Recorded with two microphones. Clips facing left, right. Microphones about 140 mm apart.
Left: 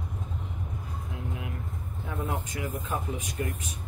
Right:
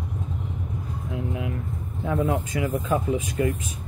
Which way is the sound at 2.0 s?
90° right.